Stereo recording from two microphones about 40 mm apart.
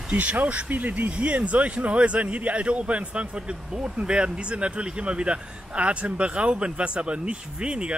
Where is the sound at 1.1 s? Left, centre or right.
Right.